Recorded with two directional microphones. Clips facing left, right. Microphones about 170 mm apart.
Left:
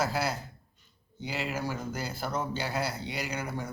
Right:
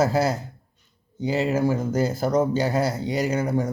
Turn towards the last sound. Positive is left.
turn(degrees=-45)  # may be behind; listen again after turning